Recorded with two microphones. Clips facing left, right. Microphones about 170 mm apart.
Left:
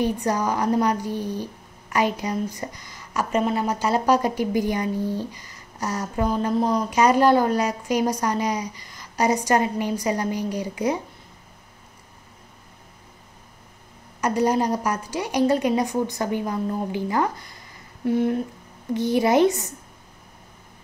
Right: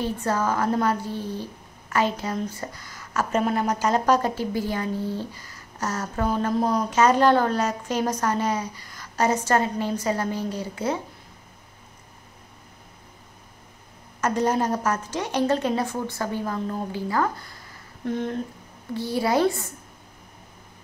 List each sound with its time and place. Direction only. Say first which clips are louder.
0.0 s a woman's voice: left 2 dB; 15° left (ahead or behind)
14.2 s a woman's voice: left 2 dB; 10° left (ahead or behind)